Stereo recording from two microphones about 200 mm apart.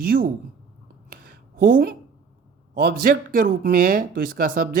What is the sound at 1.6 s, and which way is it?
Speech, 45° right (ahead or behind).